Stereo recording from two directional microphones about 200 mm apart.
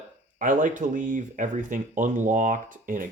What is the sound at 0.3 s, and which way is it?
Speech, 40° right (ahead or behind).